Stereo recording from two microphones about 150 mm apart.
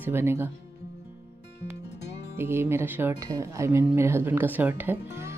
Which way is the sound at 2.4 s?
15° right (ahead or behind).